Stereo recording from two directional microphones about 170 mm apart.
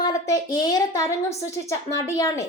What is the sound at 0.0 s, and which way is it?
Speech, 20° left (ahead or behind).